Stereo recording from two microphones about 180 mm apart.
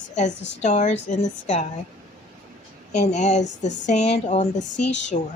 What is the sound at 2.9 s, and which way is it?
Speech, 40° left (ahead or behind).